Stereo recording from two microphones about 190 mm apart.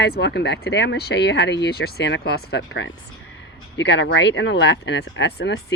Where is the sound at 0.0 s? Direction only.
60° left (ahead or behind).